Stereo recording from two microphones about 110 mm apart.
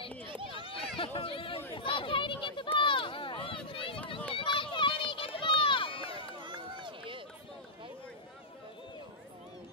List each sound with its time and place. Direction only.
0.3 s run: 50° right (ahead or behind)
0.7 s a sound: 55° left (ahead or behind)
4.4 s run: 50° left (ahead or behind)
6.4 s run: 50° right (ahead or behind)